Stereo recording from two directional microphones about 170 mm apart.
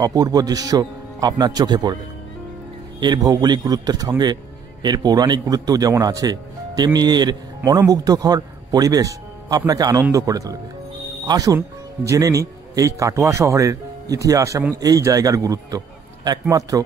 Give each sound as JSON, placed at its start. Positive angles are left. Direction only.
{"t": 0.0, "sound": "speech", "side_deg": -20}
{"t": 3.0, "sound": "speech", "side_deg": -25}